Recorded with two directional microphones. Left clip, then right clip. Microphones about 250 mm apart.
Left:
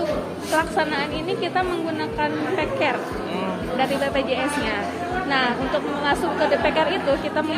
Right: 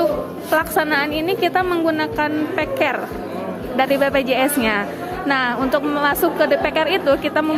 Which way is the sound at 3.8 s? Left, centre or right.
Right.